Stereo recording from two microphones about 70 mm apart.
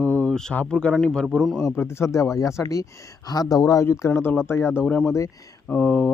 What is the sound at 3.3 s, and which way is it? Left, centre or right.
Speech, left.